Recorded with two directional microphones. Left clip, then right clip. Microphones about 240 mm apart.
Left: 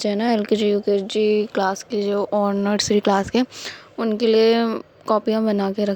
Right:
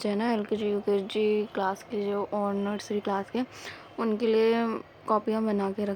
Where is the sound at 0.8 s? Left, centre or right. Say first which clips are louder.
Left 7 dB; centre.